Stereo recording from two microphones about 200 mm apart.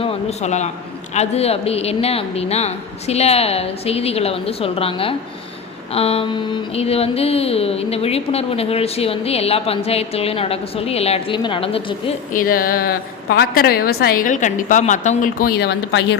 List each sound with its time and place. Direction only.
0.0 s speech: 35° left (ahead or behind)
12.3 s a woman's voice: 45° left (ahead or behind); by 16.0 s 60° left (ahead or behind)